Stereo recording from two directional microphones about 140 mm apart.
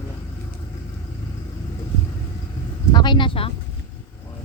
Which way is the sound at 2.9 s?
35° left (ahead or behind).